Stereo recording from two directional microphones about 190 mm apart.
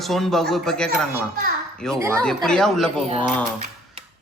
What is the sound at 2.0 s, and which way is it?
Speech, 15° right (ahead or behind).